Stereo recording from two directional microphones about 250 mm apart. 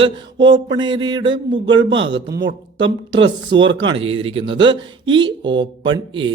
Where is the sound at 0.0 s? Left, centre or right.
Centre.